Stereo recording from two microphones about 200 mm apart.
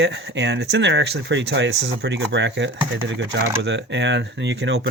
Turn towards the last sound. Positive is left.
turn(degrees=-60)  # may be behind; listen again after turning